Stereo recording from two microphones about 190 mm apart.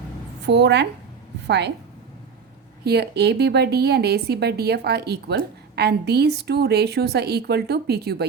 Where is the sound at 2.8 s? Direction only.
60° right (ahead or behind).